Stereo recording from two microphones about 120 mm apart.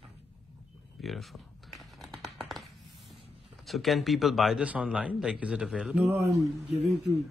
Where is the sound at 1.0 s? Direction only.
Centre (ahead or behind).